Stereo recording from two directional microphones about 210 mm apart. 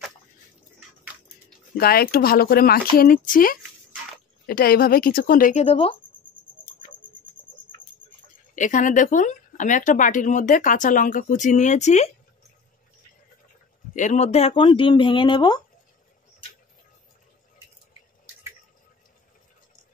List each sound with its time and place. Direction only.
1.8 s speech: 45° left (ahead or behind); by 5.9 s 25° left (ahead or behind)
8.5 s speech: 35° left (ahead or behind)
13.9 s speech: 35° left (ahead or behind)